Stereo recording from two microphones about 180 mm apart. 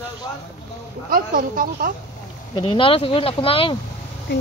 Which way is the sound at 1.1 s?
50° right (ahead or behind).